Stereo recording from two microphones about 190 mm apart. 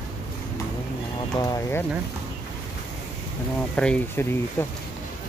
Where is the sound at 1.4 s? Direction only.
15° left (ahead or behind).